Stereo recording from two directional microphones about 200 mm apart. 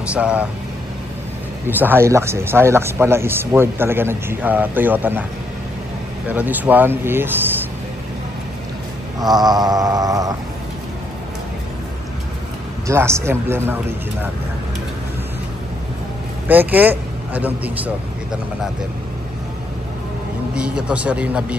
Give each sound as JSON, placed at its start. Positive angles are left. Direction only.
{"t": 0.1, "sound": "speech", "side_deg": -5}
{"t": 1.7, "sound": "speech", "side_deg": -10}
{"t": 6.2, "sound": "speech", "side_deg": -10}
{"t": 9.2, "sound": "a sound", "side_deg": -20}
{"t": 12.8, "sound": "speech", "side_deg": -15}
{"t": 16.4, "sound": "speech", "side_deg": -10}
{"t": 20.5, "sound": "speech", "side_deg": -5}